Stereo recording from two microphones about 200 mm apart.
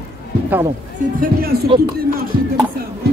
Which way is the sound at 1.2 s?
50° right (ahead or behind).